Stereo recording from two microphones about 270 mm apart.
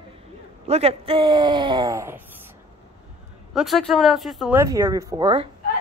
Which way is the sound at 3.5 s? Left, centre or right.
Centre.